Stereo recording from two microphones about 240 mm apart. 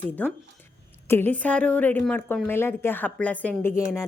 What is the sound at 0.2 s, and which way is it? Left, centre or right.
A woman's voice, centre.